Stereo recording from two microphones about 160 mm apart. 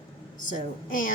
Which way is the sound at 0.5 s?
60° left (ahead or behind).